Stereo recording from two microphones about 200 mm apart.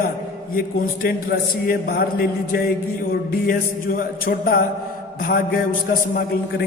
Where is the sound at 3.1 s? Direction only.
45° left (ahead or behind).